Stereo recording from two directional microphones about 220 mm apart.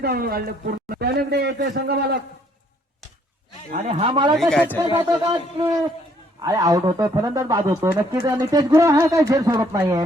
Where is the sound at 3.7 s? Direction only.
30° right (ahead or behind).